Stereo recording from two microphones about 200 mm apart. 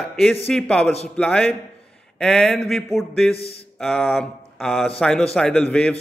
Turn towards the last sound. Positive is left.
turn(degrees=5)  # may be behind; listen again after turning